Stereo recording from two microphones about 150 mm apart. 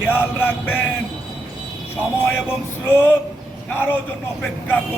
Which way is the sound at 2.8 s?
15° left (ahead or behind).